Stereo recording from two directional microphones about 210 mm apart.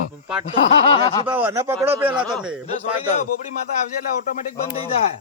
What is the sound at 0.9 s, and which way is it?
Speech, 25° left (ahead or behind).